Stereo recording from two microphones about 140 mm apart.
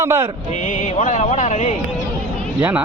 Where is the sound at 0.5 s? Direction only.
60° left (ahead or behind).